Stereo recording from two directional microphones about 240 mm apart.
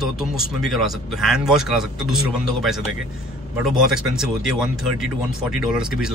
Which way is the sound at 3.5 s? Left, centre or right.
Centre.